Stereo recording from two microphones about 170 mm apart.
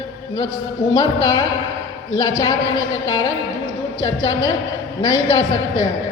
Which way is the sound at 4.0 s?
25° left (ahead or behind).